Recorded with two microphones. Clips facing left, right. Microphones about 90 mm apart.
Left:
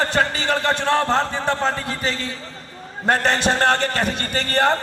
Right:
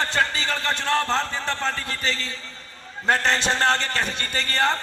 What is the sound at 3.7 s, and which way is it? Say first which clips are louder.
A man's voice: left 4 dB; 20° left (ahead or behind).